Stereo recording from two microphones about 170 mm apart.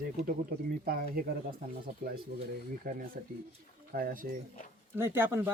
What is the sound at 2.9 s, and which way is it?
Speech, 55° right (ahead or behind).